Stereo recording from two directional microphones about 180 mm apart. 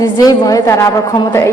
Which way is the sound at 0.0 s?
20° left (ahead or behind).